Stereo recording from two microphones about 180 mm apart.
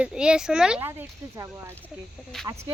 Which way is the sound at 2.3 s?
Centre (ahead or behind).